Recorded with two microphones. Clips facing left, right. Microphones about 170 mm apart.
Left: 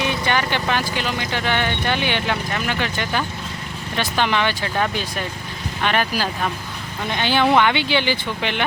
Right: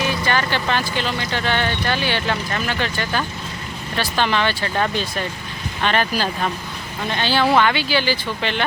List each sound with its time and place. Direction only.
0.0 s speech: 20° left (ahead or behind)